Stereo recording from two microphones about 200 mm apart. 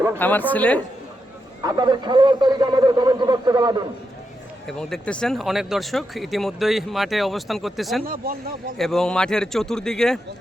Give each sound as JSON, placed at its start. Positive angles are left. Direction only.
{"t": 0.2, "sound": "a woman's voice", "side_deg": 10}
{"t": 1.6, "sound": "speech", "side_deg": -20}
{"t": 4.6, "sound": "speech", "side_deg": 5}
{"t": 8.0, "sound": "speech", "side_deg": -45}
{"t": 8.8, "sound": "speech", "side_deg": 0}